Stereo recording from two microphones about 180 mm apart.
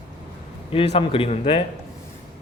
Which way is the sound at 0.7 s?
30° left (ahead or behind).